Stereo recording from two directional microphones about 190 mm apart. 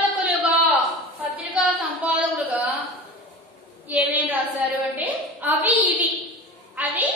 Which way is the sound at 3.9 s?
10° right (ahead or behind).